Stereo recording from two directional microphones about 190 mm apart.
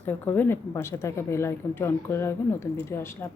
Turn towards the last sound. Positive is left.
turn(degrees=15)  # may be behind; listen again after turning